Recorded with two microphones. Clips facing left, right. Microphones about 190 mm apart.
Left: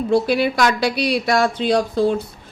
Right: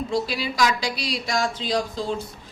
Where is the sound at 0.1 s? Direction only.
60° left (ahead or behind).